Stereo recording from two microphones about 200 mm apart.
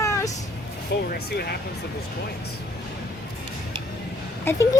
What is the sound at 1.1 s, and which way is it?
Speech, 50° left (ahead or behind).